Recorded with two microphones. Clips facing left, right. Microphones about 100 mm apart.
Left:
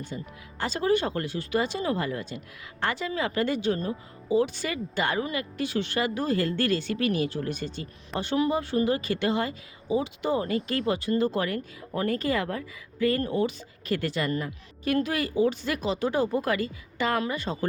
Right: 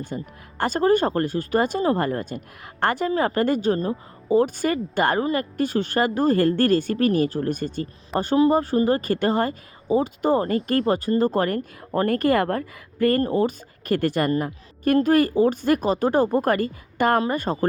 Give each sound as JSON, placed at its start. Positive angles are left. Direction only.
{"t": 0.1, "sound": "a woman's voice", "side_deg": -45}